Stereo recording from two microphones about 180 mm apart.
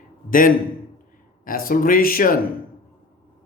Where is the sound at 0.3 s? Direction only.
50° left (ahead or behind).